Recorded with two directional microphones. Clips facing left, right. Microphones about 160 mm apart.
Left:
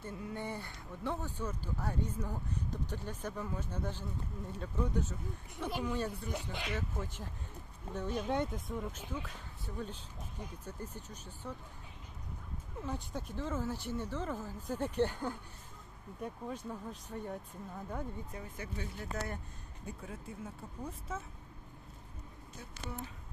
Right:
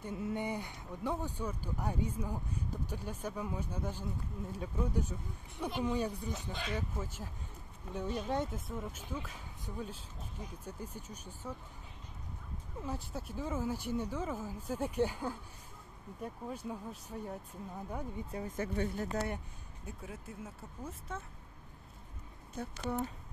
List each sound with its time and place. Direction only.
0.0 s speech: 20° right (ahead or behind)
12.8 s speech: 5° right (ahead or behind)
18.6 s speech: 50° right (ahead or behind)
19.0 s speech: 30° right (ahead or behind)
19.8 s speech: centre (ahead or behind)
22.6 s speech: 60° right (ahead or behind)